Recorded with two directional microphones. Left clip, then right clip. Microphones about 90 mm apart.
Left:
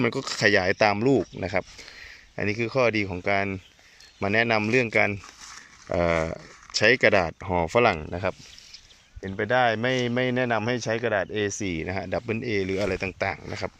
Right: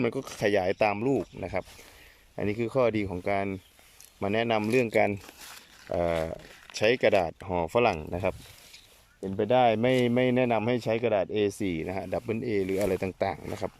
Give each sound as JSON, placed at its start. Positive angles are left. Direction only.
{"t": 0.0, "sound": "speech", "side_deg": -15}
{"t": 2.3, "sound": "speech", "side_deg": -25}
{"t": 5.9, "sound": "speech", "side_deg": 0}
{"t": 6.7, "sound": "speech", "side_deg": -15}
{"t": 8.1, "sound": "speech", "side_deg": -30}
{"t": 9.4, "sound": "speech", "side_deg": -50}
{"t": 10.1, "sound": "speech", "side_deg": -35}
{"t": 11.7, "sound": "speech", "side_deg": -25}